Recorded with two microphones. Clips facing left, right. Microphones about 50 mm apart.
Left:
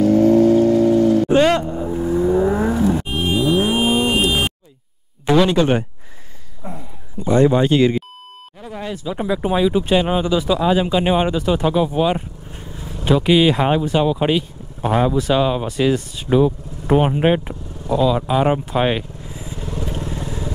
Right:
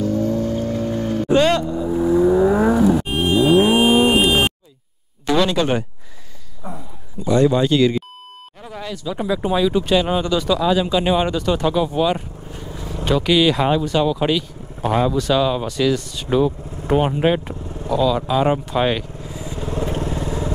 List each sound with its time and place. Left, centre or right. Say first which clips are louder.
0.0 s vehicle: left 7 dB; left
0.7 s vehicle: left 8 dB; centre
1.3 s vehicle: left 1 dB; left
1.9 s vehicle: right 3 dB; centre
3.5 s cattle: right 3 dB; centre
5.2 s speech: left 3 dB; centre
7.2 s speech: left 1 dB; left
16.2 s speech: left 2 dB; centre
17.1 s speech: left 1 dB; left
19.4 s vehicle: right 4 dB; right